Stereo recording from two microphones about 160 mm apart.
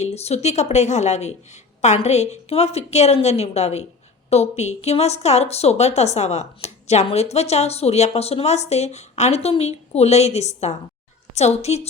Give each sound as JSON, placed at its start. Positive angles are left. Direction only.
{"t": 0.0, "sound": "a woman's voice", "side_deg": 40}